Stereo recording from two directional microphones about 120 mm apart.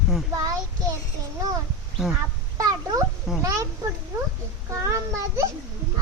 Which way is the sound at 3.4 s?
30° right (ahead or behind).